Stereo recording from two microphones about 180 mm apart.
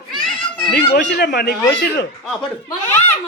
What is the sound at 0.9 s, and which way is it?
Speech, 65° left (ahead or behind).